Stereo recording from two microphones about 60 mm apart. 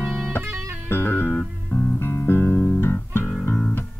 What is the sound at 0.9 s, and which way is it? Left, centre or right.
Music, left.